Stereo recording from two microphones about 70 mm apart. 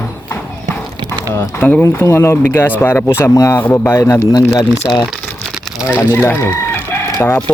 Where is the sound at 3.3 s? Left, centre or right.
Left.